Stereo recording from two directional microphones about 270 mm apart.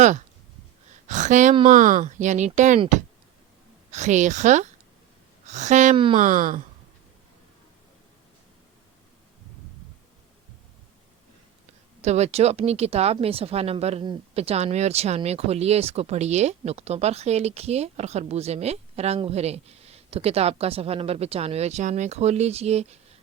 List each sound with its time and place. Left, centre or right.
0.0 s a sound: right
1.0 s speech: right
12.0 s speech: right